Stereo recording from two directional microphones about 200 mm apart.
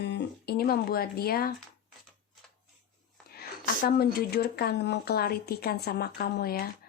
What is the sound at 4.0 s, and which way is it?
Speech, 50° left (ahead or behind).